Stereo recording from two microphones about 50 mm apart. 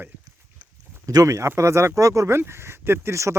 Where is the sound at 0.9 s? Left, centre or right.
Right.